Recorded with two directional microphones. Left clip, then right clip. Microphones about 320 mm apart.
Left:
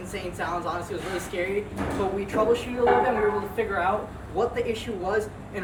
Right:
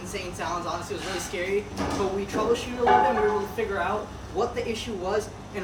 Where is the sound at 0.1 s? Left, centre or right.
Centre.